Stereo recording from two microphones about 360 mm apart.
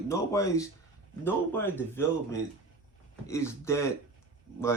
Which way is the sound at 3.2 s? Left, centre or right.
Centre.